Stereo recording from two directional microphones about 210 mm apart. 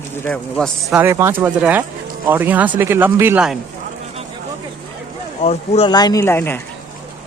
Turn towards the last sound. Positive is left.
turn(degrees=10)  # may be behind; listen again after turning